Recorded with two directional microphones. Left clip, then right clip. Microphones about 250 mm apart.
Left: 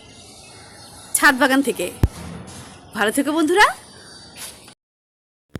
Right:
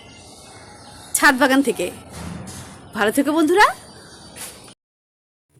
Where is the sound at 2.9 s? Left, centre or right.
Centre.